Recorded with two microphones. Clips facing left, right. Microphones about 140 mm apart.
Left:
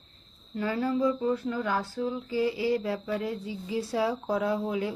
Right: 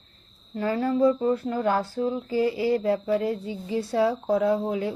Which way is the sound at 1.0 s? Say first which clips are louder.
Right 5 dB; 45° right (ahead or behind).